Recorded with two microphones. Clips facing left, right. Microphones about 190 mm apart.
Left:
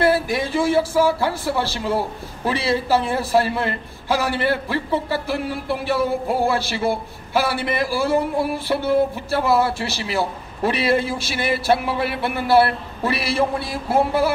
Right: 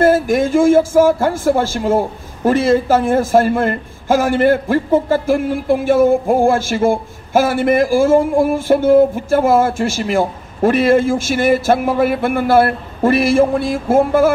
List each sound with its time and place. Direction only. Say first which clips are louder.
0.0 s speech: right 6 dB; 45° right (ahead or behind)